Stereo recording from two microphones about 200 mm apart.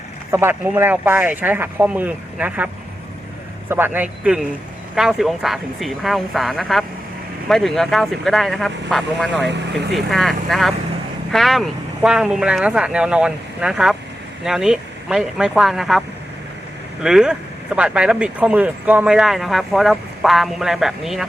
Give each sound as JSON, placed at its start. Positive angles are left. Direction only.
{"t": 0.3, "sound": "speech", "side_deg": -15}
{"t": 3.7, "sound": "speech", "side_deg": -10}
{"t": 9.5, "sound": "speech", "side_deg": -55}
{"t": 9.9, "sound": "speech", "side_deg": 0}